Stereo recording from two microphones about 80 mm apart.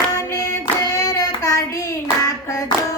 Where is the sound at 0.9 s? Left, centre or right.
Left.